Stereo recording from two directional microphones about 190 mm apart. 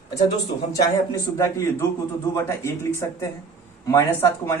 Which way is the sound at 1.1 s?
15° left (ahead or behind).